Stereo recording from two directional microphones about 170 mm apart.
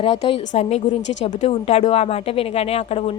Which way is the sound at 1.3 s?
40° left (ahead or behind).